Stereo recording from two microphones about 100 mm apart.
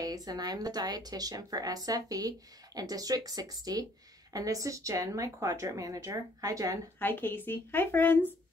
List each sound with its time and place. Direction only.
0.0 s a woman's voice: 40° right (ahead or behind)
7.0 s speech: 20° left (ahead or behind)